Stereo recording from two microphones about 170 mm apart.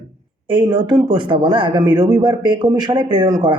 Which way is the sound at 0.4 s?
25° right (ahead or behind).